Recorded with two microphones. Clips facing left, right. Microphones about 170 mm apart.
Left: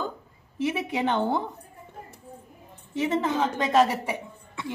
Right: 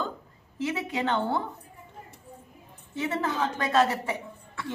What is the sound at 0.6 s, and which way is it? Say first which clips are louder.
Speech: left 3 dB; 15° left (ahead or behind).